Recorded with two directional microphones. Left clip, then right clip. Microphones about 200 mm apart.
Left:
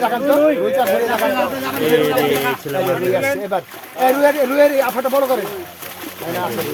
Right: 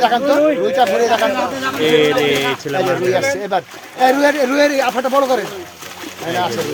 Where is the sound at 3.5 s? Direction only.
45° right (ahead or behind).